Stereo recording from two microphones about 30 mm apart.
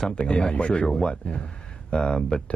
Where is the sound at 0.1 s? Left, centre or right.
Left.